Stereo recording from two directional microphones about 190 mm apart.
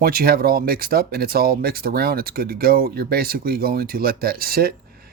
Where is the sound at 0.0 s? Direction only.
55° right (ahead or behind).